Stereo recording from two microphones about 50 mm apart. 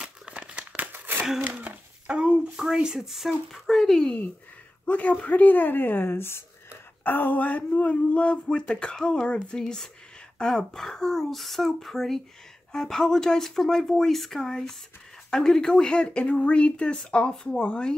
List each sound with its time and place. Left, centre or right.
0.0 s crumpling: right
0.7 s crumpling: right
1.4 s a sound: right
2.5 s speech: centre
3.1 s speech: centre
4.8 s a woman's voice: left
7.0 s speech: left